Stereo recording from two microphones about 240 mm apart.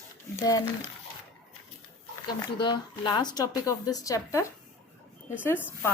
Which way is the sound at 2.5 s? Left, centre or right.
Centre.